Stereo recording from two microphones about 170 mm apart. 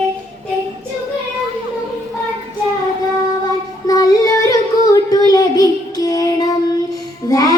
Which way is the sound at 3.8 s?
20° left (ahead or behind).